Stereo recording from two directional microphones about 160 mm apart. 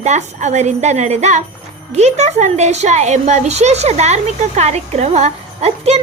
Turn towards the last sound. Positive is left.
turn(degrees=-40)  # may be behind; listen again after turning